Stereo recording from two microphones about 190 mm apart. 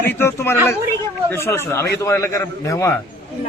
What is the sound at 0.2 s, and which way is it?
A man's voice, 15° left (ahead or behind).